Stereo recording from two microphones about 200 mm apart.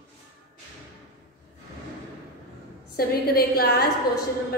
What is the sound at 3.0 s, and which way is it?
Speech, 50° left (ahead or behind).